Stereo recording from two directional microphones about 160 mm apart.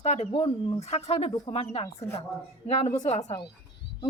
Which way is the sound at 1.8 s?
20° left (ahead or behind).